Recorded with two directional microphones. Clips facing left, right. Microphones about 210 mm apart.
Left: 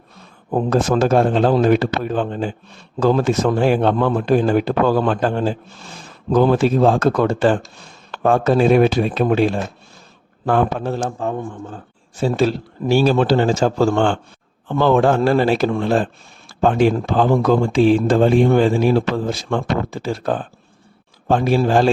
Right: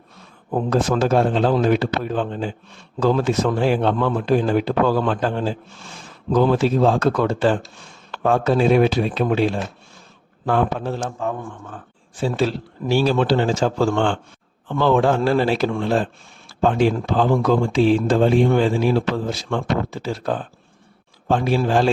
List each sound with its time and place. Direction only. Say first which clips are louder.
0.5 s speech: left 3 dB; 45° left (ahead or behind)
11.0 s speech: left 3 dB; 35° left (ahead or behind)